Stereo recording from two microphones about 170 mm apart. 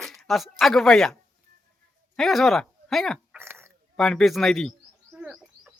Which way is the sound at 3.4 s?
15° right (ahead or behind).